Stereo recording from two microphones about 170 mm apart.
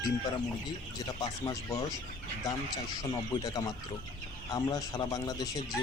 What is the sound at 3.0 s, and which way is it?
Speech, 20° left (ahead or behind).